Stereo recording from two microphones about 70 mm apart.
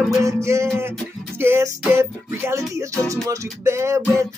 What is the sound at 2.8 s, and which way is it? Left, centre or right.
Speech, right.